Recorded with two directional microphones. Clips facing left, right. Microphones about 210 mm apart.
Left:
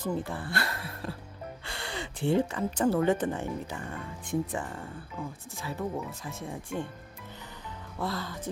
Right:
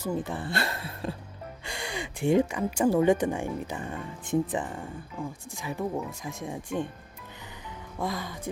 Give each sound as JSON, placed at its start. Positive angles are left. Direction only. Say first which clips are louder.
{"t": 0.0, "sound": "speech", "louder": "right 2 dB", "side_deg": -15}
{"t": 1.6, "sound": "speech", "louder": "right 4 dB", "side_deg": -15}
{"t": 7.9, "sound": "speech", "louder": "right 1 dB", "side_deg": -15}